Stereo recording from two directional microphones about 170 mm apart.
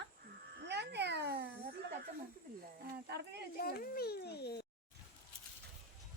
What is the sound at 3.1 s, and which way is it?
Speech, 75° right (ahead or behind).